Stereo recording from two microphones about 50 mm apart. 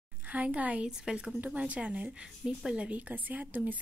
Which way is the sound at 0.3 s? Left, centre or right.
Right.